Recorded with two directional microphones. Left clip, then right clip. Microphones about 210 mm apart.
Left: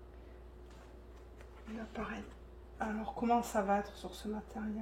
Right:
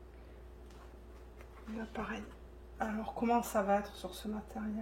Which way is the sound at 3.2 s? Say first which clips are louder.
Even; 30° right (ahead or behind).